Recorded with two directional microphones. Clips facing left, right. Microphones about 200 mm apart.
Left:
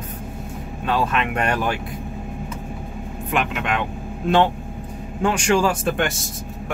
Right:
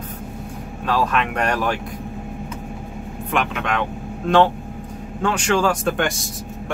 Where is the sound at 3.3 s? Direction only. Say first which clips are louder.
Even; 5° left (ahead or behind).